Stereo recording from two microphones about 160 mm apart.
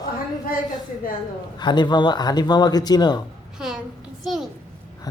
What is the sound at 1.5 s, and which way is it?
Speech, 30° left (ahead or behind).